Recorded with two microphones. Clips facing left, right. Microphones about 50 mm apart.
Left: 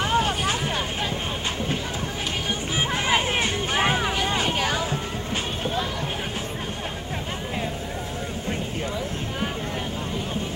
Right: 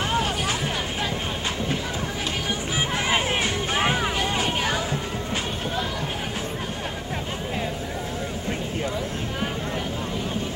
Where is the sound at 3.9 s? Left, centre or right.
Centre.